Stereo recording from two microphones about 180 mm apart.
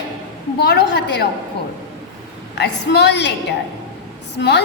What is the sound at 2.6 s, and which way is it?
Speech, 75° left (ahead or behind).